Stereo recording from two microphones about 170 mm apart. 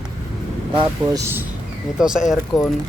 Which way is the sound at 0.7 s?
15° right (ahead or behind).